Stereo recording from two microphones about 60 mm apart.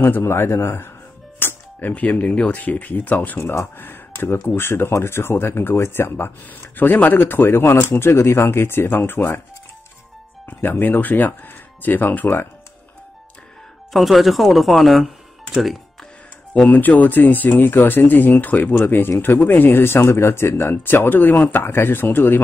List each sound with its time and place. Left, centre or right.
0.0 s a man's voice: left
1.4 s music: left
1.8 s speech: left
3.3 s a man's voice: left
3.7 s speech: left
10.4 s speech: left
13.9 s speech: centre
15.6 s music: centre
16.5 s speech: left